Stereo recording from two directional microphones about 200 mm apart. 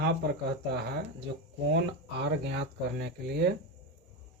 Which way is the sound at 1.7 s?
60° right (ahead or behind).